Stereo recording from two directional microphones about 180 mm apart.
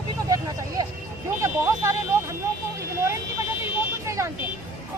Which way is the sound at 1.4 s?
15° right (ahead or behind).